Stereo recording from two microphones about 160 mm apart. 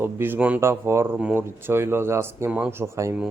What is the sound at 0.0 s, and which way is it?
Speech, 15° right (ahead or behind).